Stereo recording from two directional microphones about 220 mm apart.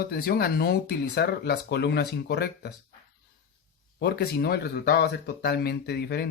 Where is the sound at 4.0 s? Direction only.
45° left (ahead or behind).